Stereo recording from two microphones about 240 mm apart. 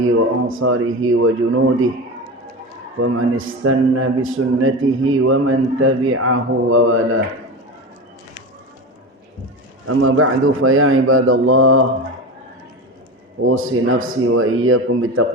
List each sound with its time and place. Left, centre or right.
0.0 s a man's voice: right
3.0 s a man's voice: right
9.8 s a man's voice: right
13.4 s a man's voice: right